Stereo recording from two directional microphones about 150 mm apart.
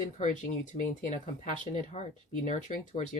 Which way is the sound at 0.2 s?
60° left (ahead or behind).